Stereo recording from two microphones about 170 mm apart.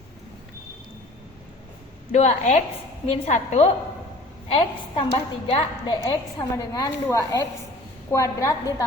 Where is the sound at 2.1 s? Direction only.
40° left (ahead or behind).